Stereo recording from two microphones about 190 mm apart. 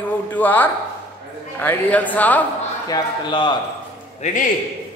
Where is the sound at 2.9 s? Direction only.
25° left (ahead or behind).